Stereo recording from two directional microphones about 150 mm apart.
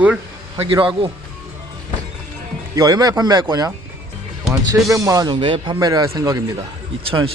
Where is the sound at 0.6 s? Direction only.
35° right (ahead or behind).